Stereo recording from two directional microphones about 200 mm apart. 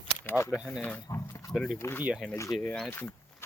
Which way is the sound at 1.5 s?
Centre (ahead or behind).